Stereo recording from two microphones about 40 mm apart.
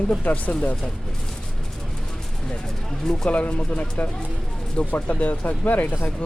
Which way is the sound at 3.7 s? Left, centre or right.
Left.